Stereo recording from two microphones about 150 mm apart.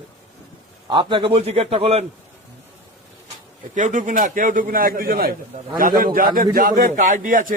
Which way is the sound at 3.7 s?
55° right (ahead or behind).